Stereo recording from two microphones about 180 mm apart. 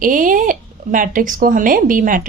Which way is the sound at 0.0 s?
50° right (ahead or behind).